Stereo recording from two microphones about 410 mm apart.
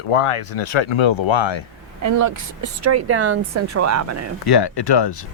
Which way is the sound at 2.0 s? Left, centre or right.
Right.